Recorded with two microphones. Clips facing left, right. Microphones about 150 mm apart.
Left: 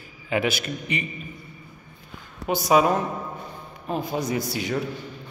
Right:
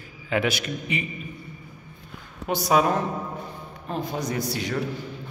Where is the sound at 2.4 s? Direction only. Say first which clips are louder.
Left 2 dB; centre (ahead or behind).